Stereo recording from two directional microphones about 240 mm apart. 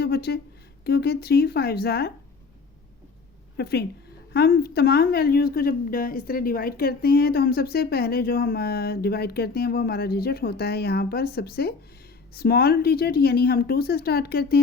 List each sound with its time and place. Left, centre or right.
0.0 s a sound: left
0.9 s a woman's voice: left
3.6 s a woman's voice: left